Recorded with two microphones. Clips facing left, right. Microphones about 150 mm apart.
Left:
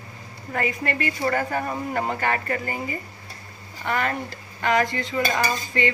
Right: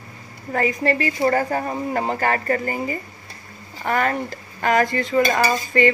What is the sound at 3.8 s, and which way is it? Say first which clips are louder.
Speech: right 4 dB; 45° right (ahead or behind).